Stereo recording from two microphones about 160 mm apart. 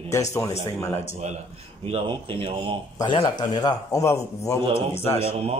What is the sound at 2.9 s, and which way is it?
A man's voice, 25° left (ahead or behind).